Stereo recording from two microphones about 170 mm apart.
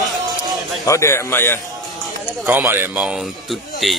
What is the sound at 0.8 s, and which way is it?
Speech, 15° left (ahead or behind).